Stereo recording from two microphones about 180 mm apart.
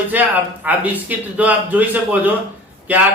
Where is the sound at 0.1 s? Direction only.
10° right (ahead or behind).